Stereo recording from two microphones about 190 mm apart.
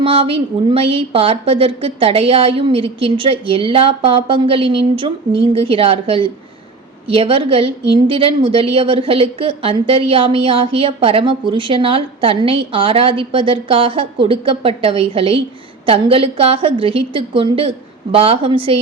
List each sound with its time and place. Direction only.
0.0 s a woman's voice: 30° right (ahead or behind)